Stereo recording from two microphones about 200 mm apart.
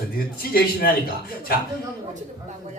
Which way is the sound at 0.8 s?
50° left (ahead or behind).